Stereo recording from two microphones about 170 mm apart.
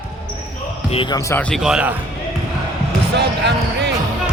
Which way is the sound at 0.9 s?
30° left (ahead or behind).